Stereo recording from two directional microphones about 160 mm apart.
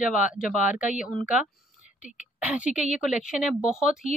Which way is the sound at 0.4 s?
5° right (ahead or behind).